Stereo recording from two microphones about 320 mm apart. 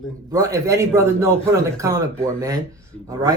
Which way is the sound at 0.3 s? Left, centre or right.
Centre.